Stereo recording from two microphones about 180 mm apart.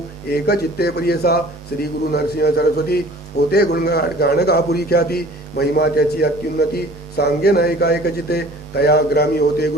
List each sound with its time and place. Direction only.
0.4 s a man's voice: 65° left (ahead or behind)